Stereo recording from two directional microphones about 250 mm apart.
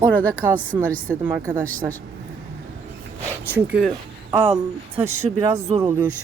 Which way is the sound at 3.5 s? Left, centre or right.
Centre.